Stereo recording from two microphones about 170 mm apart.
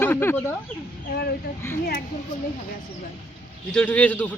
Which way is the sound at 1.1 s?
70° left (ahead or behind).